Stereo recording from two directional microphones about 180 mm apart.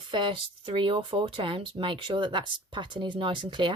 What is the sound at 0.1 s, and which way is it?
Speech, 25° right (ahead or behind).